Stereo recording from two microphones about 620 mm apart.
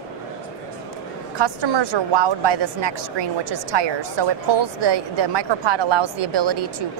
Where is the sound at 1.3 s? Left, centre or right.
Right.